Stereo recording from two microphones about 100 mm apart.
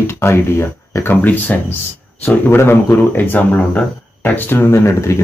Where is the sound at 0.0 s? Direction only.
25° left (ahead or behind).